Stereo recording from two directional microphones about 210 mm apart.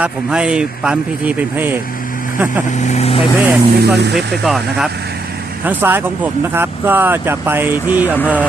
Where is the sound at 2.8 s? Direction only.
30° left (ahead or behind).